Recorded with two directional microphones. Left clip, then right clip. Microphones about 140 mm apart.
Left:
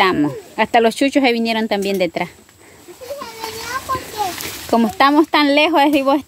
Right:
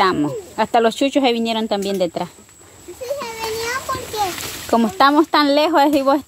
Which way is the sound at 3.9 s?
90° right.